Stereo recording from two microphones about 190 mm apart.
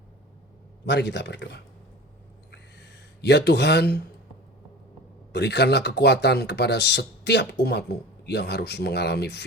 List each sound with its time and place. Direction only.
0.9 s speech: 65° left (ahead or behind)
2.5 s a sound: 60° left (ahead or behind)
5.3 s speech: 65° left (ahead or behind)